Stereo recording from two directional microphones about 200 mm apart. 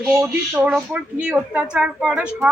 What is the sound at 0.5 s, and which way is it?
Speech, 5° right (ahead or behind).